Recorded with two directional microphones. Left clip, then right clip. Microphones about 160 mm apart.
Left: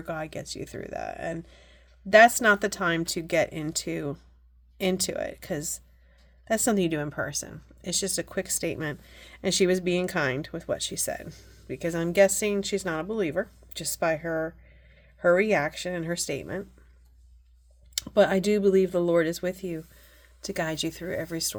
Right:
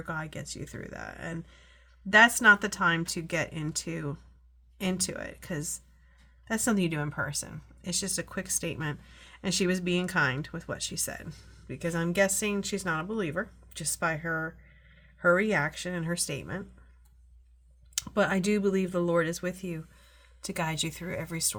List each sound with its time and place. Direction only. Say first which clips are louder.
0.0 s speech: left 3 dB; 30° left (ahead or behind)
17.9 s speech: left 6 dB; 35° left (ahead or behind)